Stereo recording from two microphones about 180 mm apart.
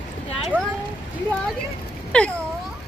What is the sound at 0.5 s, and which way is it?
Speech, 10° right (ahead or behind).